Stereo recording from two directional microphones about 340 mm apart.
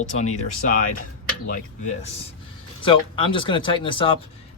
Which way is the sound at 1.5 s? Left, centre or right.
Left.